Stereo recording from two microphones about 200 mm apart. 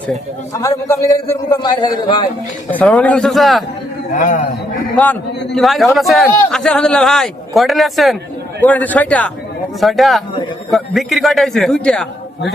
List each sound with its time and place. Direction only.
0.5 s a man's voice: 15° left (ahead or behind)
2.6 s a man's voice: 5° left (ahead or behind)
4.1 s a man's voice: 40° left (ahead or behind)
4.9 s a man's voice: 5° left (ahead or behind)